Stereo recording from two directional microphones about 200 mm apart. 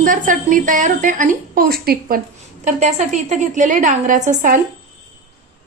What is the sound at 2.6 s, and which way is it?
A woman's voice, 35° right (ahead or behind).